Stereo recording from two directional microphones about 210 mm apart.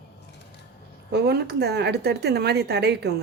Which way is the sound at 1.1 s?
50° right (ahead or behind).